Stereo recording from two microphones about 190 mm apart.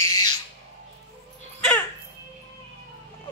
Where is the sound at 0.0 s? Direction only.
20° left (ahead or behind).